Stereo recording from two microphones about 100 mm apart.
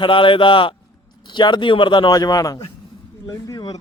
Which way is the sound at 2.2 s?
35° left (ahead or behind).